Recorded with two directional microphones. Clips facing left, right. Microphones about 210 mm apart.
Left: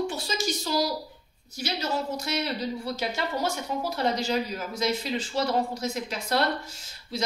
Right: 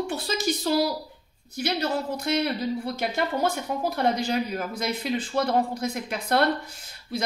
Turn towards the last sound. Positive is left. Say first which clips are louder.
# right 1 dB
turn(degrees=-55)  # may be behind; listen again after turning